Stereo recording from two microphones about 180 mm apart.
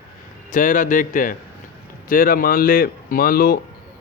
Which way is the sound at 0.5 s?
45° left (ahead or behind).